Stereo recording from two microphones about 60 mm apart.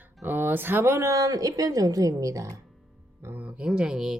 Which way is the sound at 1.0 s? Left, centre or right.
Right.